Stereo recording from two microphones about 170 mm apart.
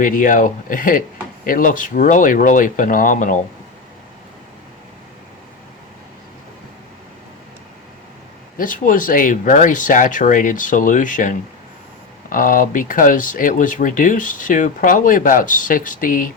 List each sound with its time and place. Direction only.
0.0 s speech: 55° left (ahead or behind)
8.5 s speech: 50° left (ahead or behind)